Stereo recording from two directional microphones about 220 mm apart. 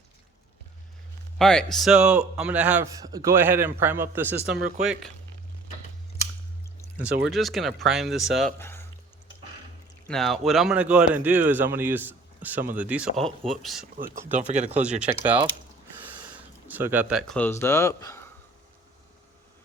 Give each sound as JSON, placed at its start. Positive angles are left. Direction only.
{"t": 1.4, "sound": "a man's voice", "side_deg": 0}
{"t": 7.3, "sound": "speech", "side_deg": 0}
{"t": 8.5, "sound": "a sound", "side_deg": 10}
{"t": 10.1, "sound": "speech", "side_deg": 0}
{"t": 14.3, "sound": "speech", "side_deg": -35}
{"t": 14.7, "sound": "speech", "side_deg": -5}